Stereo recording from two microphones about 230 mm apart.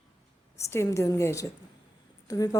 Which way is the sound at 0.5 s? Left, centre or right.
Centre.